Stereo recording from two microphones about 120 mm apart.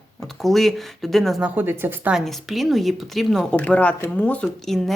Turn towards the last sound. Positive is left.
turn(degrees=0)  # may be behind; listen again after turning